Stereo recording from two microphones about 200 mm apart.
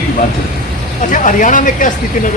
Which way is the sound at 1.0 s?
40° left (ahead or behind).